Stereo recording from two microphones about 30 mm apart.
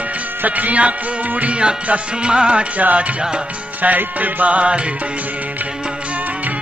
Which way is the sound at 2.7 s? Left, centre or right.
Right.